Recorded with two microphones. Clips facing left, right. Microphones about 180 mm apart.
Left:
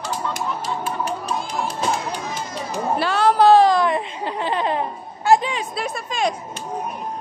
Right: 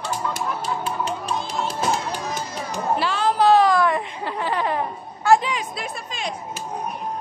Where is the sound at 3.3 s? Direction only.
30° left (ahead or behind).